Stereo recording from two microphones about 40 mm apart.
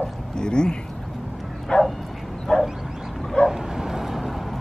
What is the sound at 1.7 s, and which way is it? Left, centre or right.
Bow-wow, left.